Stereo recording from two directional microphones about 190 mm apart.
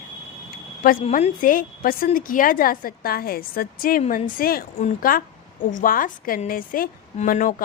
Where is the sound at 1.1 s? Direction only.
45° left (ahead or behind).